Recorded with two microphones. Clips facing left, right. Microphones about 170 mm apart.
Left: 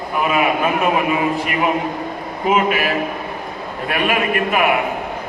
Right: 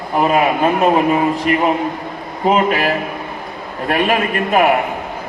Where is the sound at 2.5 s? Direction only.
40° right (ahead or behind).